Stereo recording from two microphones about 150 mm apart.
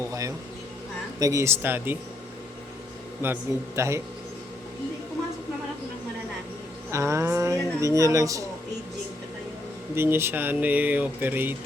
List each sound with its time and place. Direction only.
0.1 s a sound: 20° right (ahead or behind)
1.2 s speech: 20° right (ahead or behind)
3.2 s speech: 15° right (ahead or behind)
6.9 s speech: 20° right (ahead or behind)
9.9 s speech: 15° right (ahead or behind)